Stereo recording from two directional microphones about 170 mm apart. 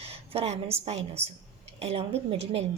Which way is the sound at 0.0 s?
35° right (ahead or behind).